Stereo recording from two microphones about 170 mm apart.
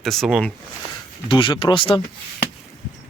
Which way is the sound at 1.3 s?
30° left (ahead or behind).